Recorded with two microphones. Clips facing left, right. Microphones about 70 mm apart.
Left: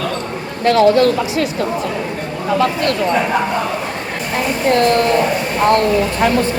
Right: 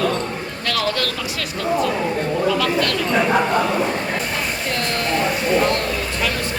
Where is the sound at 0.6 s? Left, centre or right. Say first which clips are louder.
Left 12 dB; left.